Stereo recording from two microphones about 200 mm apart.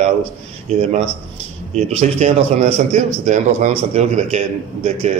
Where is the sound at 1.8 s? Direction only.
35° right (ahead or behind).